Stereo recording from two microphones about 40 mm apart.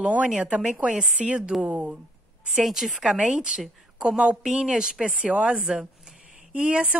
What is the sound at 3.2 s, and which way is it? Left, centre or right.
A woman's voice, right.